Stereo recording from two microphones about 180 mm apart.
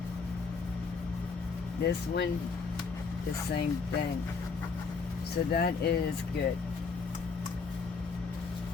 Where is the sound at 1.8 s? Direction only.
70° left (ahead or behind).